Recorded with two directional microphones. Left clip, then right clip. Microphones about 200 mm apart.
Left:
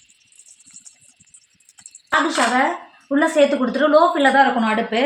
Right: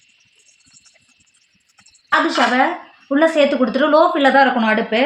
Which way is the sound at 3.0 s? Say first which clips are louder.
Right 2 dB; 45° right (ahead or behind).